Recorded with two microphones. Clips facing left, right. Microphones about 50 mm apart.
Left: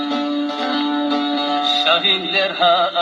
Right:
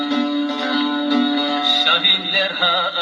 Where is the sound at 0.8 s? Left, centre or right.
Left.